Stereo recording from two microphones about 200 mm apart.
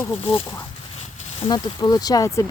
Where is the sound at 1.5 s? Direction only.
20° left (ahead or behind).